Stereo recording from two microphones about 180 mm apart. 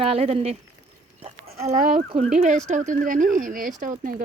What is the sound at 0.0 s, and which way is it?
Speech, 35° right (ahead or behind).